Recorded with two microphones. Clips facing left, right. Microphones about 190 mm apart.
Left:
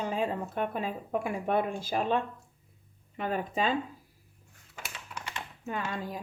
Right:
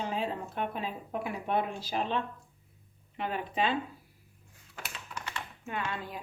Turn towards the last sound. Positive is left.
turn(degrees=40)  # may be behind; listen again after turning